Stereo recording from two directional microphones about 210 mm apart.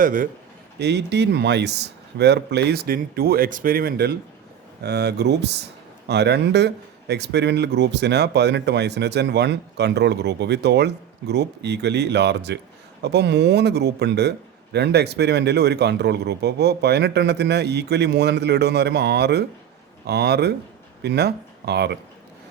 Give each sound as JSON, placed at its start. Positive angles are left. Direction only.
{"t": 0.0, "sound": "a man's voice", "side_deg": -40}
{"t": 0.8, "sound": "speech", "side_deg": -55}